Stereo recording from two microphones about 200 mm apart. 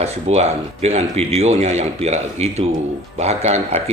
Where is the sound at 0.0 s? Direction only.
30° right (ahead or behind).